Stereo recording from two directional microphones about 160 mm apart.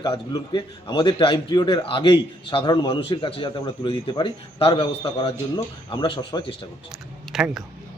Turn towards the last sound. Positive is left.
turn(degrees=-5)  # may be behind; listen again after turning